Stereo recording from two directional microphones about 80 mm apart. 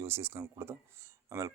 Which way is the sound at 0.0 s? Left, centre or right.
Right.